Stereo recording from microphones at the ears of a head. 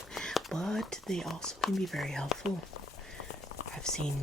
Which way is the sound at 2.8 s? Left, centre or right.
Left.